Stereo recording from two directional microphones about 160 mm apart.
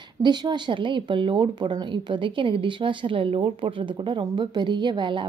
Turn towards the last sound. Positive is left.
turn(degrees=-30)  # may be behind; listen again after turning